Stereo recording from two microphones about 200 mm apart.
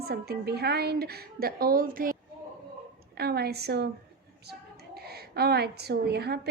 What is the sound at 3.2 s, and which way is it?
Speech, 50° right (ahead or behind).